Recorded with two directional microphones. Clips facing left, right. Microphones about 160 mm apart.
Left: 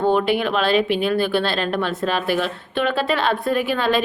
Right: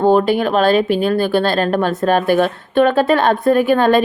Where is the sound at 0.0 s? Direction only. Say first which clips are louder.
Right 5 dB; 40° right (ahead or behind).